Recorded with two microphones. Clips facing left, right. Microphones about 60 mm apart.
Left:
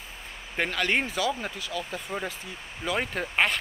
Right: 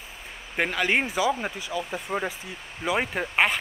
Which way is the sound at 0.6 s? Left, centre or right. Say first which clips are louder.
Right 2 dB; centre.